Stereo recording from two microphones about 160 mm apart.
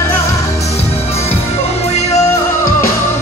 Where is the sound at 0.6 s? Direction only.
40° left (ahead or behind).